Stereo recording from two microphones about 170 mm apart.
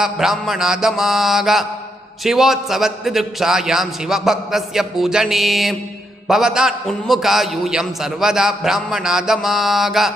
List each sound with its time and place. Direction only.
0.0 s a man's voice: centre (ahead or behind)